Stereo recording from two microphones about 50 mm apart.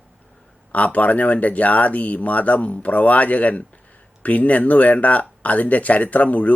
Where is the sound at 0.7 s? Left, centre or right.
Left.